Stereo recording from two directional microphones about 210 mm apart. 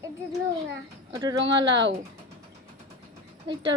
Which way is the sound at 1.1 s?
20° right (ahead or behind).